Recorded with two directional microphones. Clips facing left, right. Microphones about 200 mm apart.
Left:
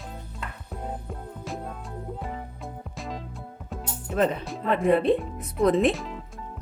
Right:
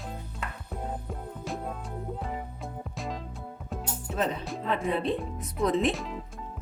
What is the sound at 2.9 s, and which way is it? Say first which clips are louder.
Music: even; centre (ahead or behind).